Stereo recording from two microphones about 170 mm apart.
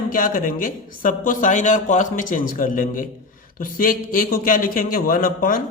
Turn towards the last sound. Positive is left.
turn(degrees=55)  # may be behind; listen again after turning